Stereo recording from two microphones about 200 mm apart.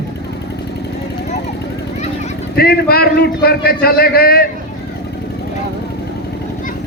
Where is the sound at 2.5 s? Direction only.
50° left (ahead or behind).